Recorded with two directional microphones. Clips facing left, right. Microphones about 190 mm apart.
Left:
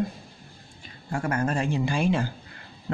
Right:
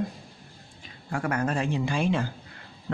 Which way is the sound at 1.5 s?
Centre (ahead or behind).